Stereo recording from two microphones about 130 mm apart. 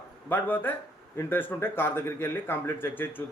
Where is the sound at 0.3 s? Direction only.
15° left (ahead or behind).